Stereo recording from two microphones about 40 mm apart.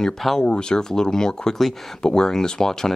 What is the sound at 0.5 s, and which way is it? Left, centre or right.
Speech, left.